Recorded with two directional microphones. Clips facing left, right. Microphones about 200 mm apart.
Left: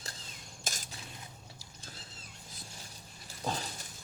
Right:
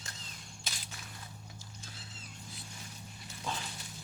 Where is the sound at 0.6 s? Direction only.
45° left (ahead or behind).